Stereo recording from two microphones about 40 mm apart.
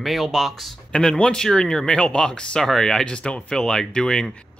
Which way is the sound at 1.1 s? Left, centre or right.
Centre.